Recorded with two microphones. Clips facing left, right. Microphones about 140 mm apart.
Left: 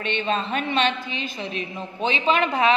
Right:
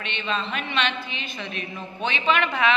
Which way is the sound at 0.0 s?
45° left (ahead or behind).